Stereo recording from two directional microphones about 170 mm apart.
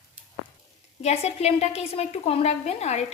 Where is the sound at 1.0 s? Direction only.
40° left (ahead or behind).